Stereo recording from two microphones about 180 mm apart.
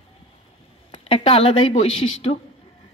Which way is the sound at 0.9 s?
30° left (ahead or behind).